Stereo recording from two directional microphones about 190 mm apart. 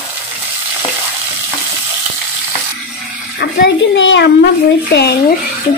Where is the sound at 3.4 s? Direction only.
60° left (ahead or behind).